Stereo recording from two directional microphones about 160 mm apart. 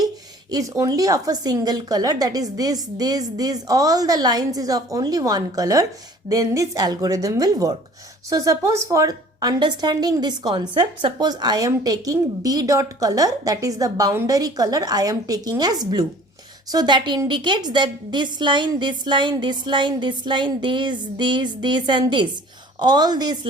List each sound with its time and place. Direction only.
0.5 s a woman's voice: 20° right (ahead or behind)